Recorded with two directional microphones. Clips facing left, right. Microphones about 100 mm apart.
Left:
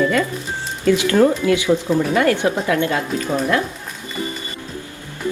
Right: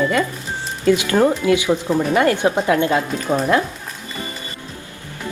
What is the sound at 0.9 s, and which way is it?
A woman's voice, 20° right (ahead or behind).